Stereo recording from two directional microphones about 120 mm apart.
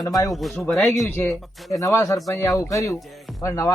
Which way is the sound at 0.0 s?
30° left (ahead or behind).